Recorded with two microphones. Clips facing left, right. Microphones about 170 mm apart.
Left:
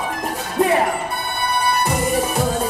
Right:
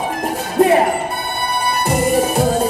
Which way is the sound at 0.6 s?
35° right (ahead or behind).